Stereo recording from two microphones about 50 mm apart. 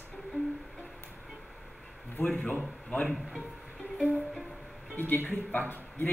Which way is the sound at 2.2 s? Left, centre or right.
Left.